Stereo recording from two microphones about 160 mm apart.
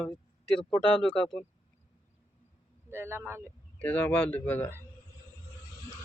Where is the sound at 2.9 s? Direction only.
15° right (ahead or behind).